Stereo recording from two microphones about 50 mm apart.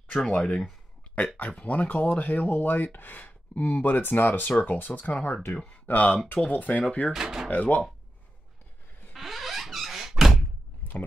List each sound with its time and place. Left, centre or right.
0.3 s speech: left
7.1 s speech: centre
7.4 s speech: left
9.1 s squeak: centre
10.8 s a sound: left